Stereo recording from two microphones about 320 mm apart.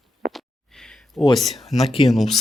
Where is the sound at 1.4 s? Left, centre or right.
Centre.